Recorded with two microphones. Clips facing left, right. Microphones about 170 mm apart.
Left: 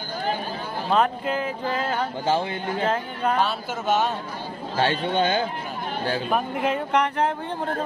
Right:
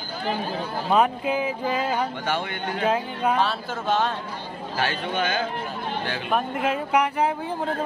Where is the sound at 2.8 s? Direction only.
10° right (ahead or behind).